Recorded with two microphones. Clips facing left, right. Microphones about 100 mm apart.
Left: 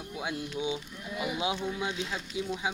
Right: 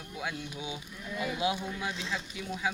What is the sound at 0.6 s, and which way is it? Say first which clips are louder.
Speech: left 6 dB; 20° left (ahead or behind).